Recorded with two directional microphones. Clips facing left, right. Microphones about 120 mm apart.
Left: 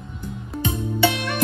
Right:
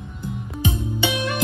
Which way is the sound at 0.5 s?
Centre (ahead or behind).